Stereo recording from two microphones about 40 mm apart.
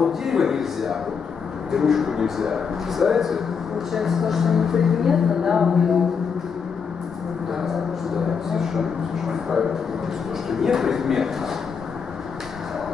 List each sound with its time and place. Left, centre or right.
0.0 s speech: centre
8.5 s speech: centre